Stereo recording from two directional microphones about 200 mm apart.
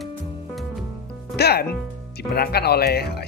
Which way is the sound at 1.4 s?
50° left (ahead or behind).